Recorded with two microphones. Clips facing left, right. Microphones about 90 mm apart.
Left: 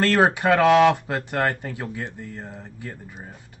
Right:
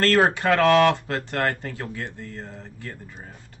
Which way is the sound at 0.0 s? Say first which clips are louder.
Left 1 dB; 15° left (ahead or behind).